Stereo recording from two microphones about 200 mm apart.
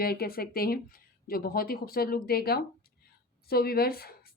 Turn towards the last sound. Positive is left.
turn(degrees=50)  # may be behind; listen again after turning